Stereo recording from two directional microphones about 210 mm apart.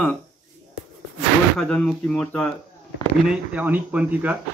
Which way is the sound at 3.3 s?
5° right (ahead or behind).